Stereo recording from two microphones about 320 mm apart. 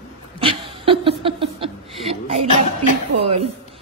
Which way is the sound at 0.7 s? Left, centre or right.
Centre.